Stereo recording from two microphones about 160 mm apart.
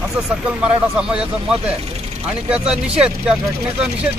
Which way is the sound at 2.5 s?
5° right (ahead or behind).